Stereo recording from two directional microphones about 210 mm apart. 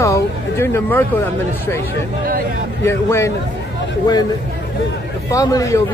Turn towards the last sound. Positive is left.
turn(degrees=15)  # may be behind; listen again after turning